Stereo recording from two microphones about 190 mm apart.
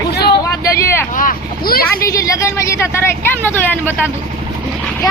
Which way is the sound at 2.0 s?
15° left (ahead or behind).